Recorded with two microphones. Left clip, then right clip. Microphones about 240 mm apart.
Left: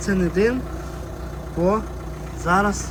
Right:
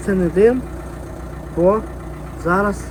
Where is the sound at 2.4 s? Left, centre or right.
Centre.